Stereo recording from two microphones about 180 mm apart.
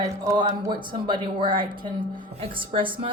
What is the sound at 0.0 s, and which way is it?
Speech, 20° right (ahead or behind).